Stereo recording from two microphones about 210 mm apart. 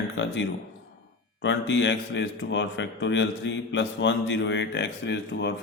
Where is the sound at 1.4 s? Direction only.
60° left (ahead or behind).